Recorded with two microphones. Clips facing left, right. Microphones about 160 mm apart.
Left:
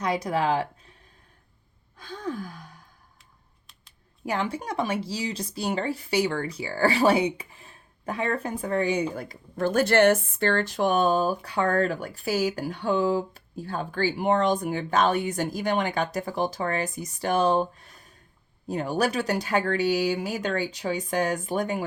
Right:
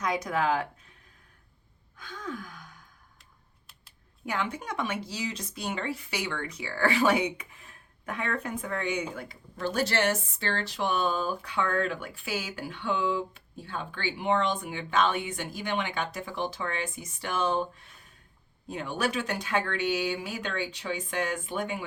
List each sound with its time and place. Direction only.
0.0 s speech: 30° left (ahead or behind)
2.0 s gasp: 30° left (ahead or behind)
4.3 s speech: 30° left (ahead or behind)